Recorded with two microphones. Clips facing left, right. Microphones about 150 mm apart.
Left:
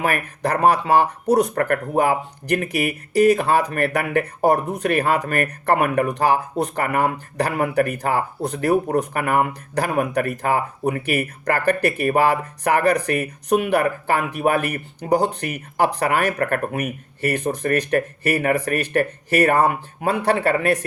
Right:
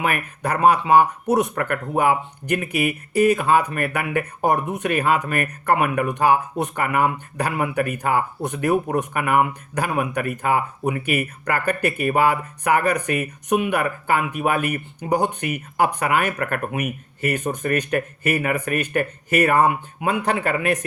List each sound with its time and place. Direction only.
0.0 s speech: 35° left (ahead or behind)